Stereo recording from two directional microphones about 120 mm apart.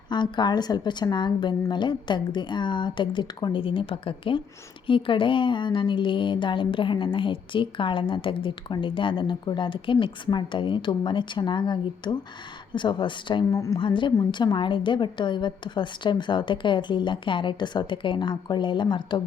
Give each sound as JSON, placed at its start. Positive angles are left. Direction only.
{"t": 0.1, "sound": "a woman's voice", "side_deg": 40}
{"t": 13.5, "sound": "a woman's voice", "side_deg": 25}
{"t": 13.7, "sound": "a woman's voice", "side_deg": 45}